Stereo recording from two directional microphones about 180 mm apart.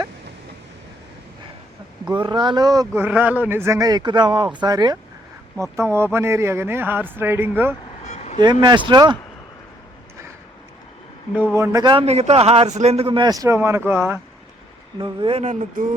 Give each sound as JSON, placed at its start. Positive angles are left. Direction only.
{"t": 2.1, "sound": "a man's voice", "side_deg": -25}
{"t": 8.0, "sound": "vehicle", "side_deg": 40}
{"t": 8.6, "sound": "speech", "side_deg": -25}
{"t": 11.5, "sound": "speech", "side_deg": -20}
{"t": 12.0, "sound": "a man's voice", "side_deg": -35}
{"t": 14.9, "sound": "a man's voice", "side_deg": -25}